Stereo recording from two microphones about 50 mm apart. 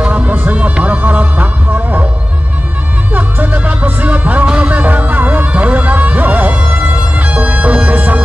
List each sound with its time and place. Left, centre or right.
0.0 s music: right
3.1 s music: right